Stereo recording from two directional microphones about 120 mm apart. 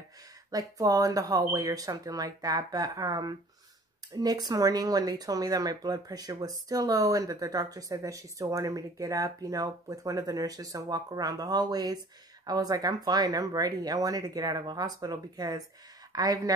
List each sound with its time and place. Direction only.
0.5 s speech: 30° right (ahead or behind)